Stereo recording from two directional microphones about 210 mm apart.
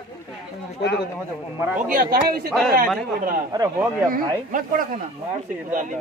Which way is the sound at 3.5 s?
15° right (ahead or behind).